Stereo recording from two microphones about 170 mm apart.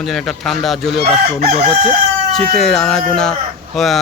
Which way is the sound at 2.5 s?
5° left (ahead or behind).